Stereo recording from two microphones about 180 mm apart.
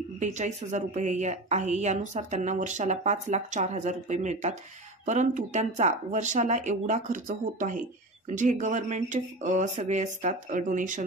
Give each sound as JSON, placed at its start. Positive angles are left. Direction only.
{"t": 0.2, "sound": "a woman's voice", "side_deg": -40}